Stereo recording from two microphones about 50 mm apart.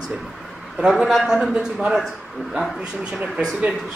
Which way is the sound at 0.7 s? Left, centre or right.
Centre.